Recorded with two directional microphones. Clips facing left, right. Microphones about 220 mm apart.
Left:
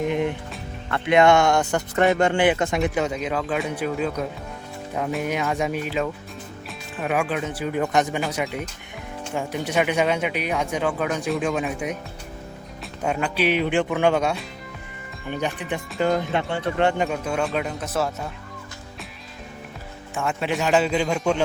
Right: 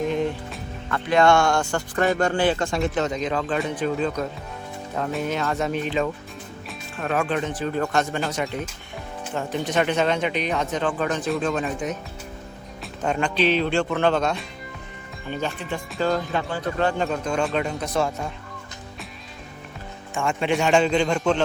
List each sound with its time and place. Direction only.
0.1 s music: 15° left (ahead or behind)
0.9 s a man's voice: 25° left (ahead or behind); by 8.6 s 5° left (ahead or behind)
9.6 s speech: 10° left (ahead or behind)
13.0 s speech: 5° left (ahead or behind)
20.1 s a man's voice: 5° left (ahead or behind)